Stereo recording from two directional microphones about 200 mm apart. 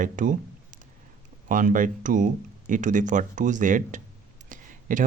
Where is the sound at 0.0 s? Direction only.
40° right (ahead or behind).